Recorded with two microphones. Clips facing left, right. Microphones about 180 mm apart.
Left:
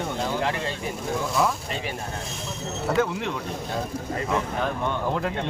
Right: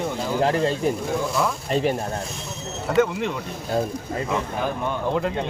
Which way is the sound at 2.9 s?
Centre (ahead or behind).